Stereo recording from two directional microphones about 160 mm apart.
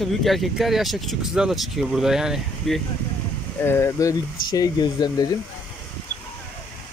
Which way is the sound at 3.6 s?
15° left (ahead or behind).